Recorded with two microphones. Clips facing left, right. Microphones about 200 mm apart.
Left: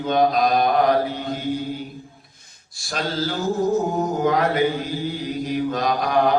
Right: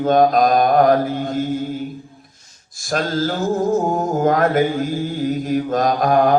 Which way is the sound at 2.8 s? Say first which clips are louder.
Right 5 dB; 45° right (ahead or behind).